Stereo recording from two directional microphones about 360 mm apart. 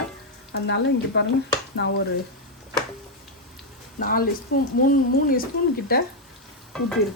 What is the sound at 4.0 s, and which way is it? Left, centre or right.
Speech, left.